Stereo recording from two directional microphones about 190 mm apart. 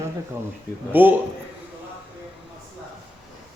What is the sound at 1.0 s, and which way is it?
Speech, 10° right (ahead or behind).